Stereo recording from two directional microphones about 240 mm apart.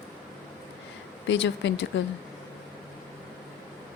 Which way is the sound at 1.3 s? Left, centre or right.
Left.